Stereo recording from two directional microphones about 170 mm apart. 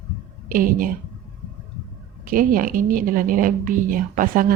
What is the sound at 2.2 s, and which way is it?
A woman's voice, 55° right (ahead or behind).